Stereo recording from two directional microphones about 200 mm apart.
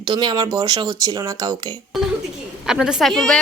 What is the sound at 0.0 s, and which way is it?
Speech, 20° right (ahead or behind).